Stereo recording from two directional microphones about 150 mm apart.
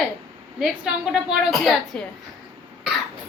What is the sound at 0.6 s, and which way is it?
A woman's voice, 5° right (ahead or behind).